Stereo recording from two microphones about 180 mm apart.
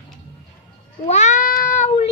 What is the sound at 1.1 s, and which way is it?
Speech, 40° left (ahead or behind).